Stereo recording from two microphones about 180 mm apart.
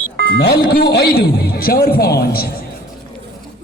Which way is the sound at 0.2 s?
65° left (ahead or behind).